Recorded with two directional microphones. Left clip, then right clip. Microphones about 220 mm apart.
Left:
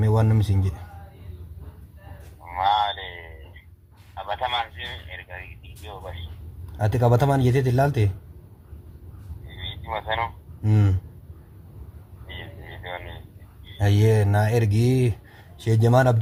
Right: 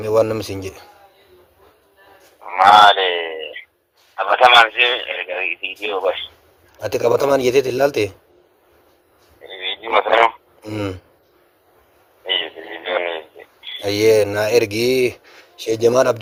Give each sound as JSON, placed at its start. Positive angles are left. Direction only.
{"t": 0.0, "sound": "speech", "side_deg": -45}
{"t": 2.6, "sound": "a sound", "side_deg": -40}
{"t": 4.4, "sound": "speech", "side_deg": -40}
{"t": 9.6, "sound": "frog", "side_deg": -40}
{"t": 12.3, "sound": "radio", "side_deg": -35}
{"t": 13.7, "sound": "speech", "side_deg": -40}